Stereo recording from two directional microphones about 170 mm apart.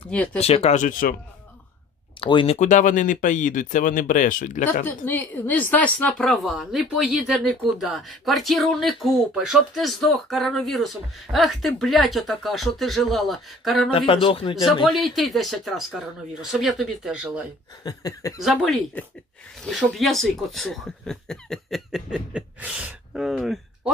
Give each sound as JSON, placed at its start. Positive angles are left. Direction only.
{"t": 0.1, "sound": "speech", "side_deg": 5}
{"t": 0.4, "sound": "speech", "side_deg": 40}
{"t": 2.1, "sound": "speech", "side_deg": 30}
{"t": 4.8, "sound": "speech", "side_deg": 10}
{"t": 13.8, "sound": "speech", "side_deg": 30}
{"t": 14.9, "sound": "speech", "side_deg": 0}
{"t": 17.8, "sound": "speech", "side_deg": 25}
{"t": 18.4, "sound": "speech", "side_deg": 0}